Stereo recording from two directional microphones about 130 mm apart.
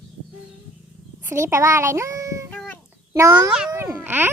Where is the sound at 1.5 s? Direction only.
20° right (ahead or behind).